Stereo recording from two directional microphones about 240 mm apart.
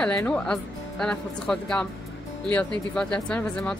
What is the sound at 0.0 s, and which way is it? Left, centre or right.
Speech, centre.